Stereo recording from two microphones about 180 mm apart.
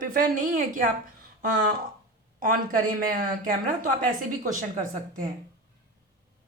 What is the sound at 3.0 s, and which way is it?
A woman's voice, 50° right (ahead or behind).